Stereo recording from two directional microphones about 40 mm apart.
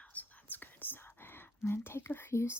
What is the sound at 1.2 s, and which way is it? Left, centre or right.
Speech, left.